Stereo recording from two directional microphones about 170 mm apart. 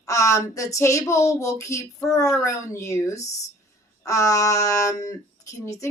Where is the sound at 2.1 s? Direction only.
20° left (ahead or behind).